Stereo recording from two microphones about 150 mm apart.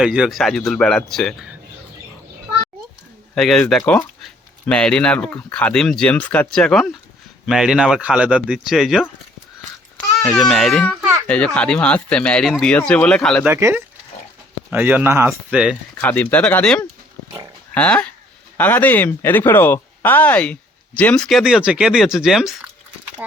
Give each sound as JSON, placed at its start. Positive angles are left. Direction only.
{"t": 0.0, "sound": "speech", "side_deg": -5}
{"t": 3.3, "sound": "speech", "side_deg": 0}
{"t": 10.2, "sound": "speech", "side_deg": 5}
{"t": 13.4, "sound": "speech", "side_deg": -20}
{"t": 16.0, "sound": "speech", "side_deg": 10}